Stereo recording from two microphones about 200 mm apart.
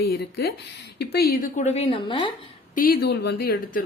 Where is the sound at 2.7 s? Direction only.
50° left (ahead or behind).